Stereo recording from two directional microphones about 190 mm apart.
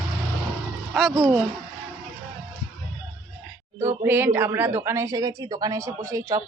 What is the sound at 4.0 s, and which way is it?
Speech, 10° right (ahead or behind).